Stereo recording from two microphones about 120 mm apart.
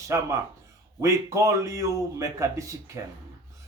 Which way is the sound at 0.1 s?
20° right (ahead or behind).